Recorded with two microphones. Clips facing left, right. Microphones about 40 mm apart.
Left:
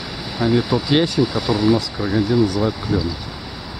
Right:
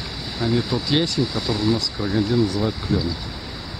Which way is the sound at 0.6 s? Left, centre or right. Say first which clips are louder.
Left 4 dB; centre.